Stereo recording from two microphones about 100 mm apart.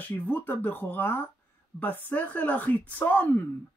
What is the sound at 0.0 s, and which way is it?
Speech, 20° left (ahead or behind).